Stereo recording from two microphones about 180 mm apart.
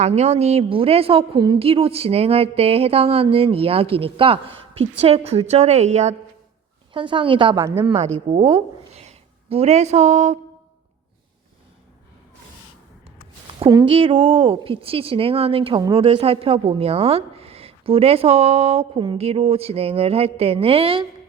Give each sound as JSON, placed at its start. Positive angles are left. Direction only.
{"t": 0.0, "sound": "a woman's voice", "side_deg": -40}
{"t": 6.9, "sound": "a woman's voice", "side_deg": -25}
{"t": 13.6, "sound": "a woman's voice", "side_deg": -25}